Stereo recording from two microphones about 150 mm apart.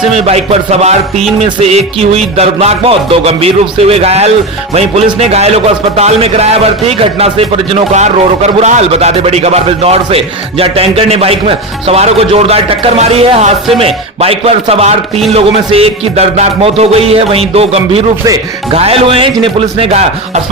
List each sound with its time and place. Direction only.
0.1 s a man's voice: 45° right (ahead or behind)
15.3 s music: 40° right (ahead or behind)